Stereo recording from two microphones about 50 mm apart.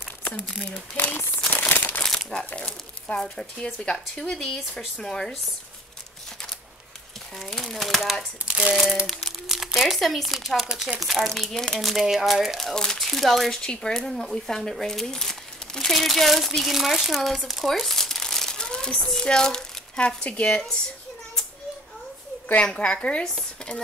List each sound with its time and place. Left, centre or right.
0.9 s speech: left
1.5 s crumpling: left
2.1 s speech: centre
7.3 s speech: centre
8.5 s speech: centre
10.7 s speech: centre
11.0 s speech: centre
11.5 s speech: centre
11.8 s speech: centre
12.7 s a child's voice: centre
22.6 s a woman's voice: centre